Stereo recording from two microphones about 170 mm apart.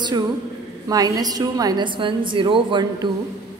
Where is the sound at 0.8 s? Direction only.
20° right (ahead or behind).